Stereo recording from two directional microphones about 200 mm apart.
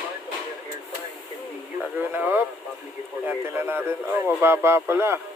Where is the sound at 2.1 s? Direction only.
10° right (ahead or behind).